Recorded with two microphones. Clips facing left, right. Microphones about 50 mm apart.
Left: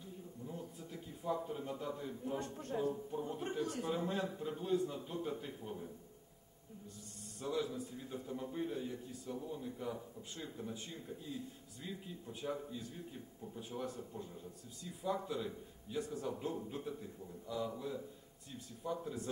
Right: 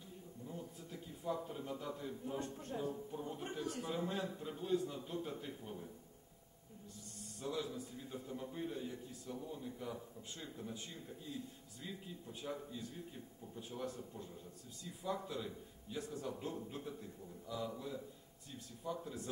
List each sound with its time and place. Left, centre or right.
0.5 s a sound: centre
2.7 s a man's voice: centre
7.3 s a man's voice: centre